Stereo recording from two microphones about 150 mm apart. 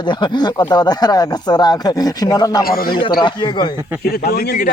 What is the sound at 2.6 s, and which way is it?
Speech, 80° left.